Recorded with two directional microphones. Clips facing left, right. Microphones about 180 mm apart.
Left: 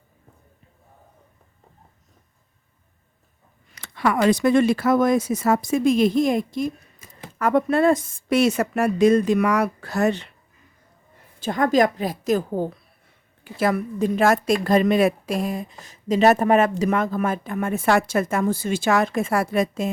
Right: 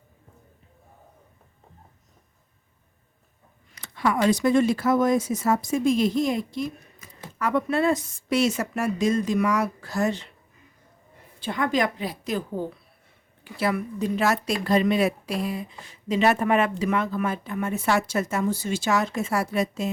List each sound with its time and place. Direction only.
3.8 s speech: 70° left (ahead or behind)
11.3 s a woman's voice: 45° left (ahead or behind)